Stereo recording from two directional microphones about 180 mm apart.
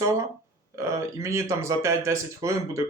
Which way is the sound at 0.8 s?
15° right (ahead or behind).